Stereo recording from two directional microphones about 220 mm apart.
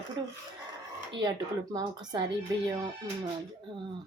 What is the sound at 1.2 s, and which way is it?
Speech, 20° right (ahead or behind).